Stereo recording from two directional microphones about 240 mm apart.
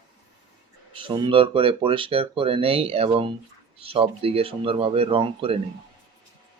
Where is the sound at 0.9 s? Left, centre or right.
Centre.